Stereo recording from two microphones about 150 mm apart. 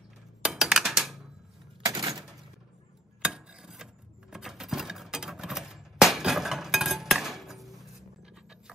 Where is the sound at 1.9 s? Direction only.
25° right (ahead or behind).